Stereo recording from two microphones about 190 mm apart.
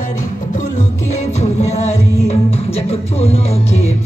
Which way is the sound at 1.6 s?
35° left (ahead or behind).